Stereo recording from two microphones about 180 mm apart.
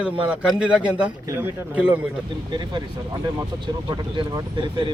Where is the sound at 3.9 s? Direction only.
25° right (ahead or behind).